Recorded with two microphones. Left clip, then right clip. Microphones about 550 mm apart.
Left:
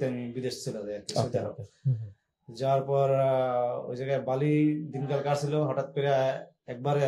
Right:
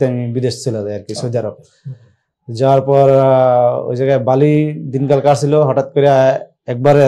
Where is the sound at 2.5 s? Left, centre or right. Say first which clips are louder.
Right 15 dB; right.